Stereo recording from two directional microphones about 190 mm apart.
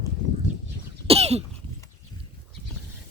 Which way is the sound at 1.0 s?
30° right (ahead or behind).